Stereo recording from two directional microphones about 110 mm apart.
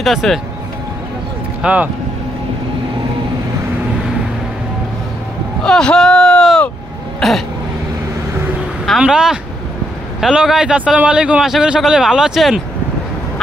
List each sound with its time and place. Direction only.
0.0 s speech: centre (ahead or behind)
1.6 s speech: 10° right (ahead or behind)
5.6 s speech: 5° left (ahead or behind)
7.2 s throat clearing: centre (ahead or behind)
8.8 s a man's voice: 5° right (ahead or behind)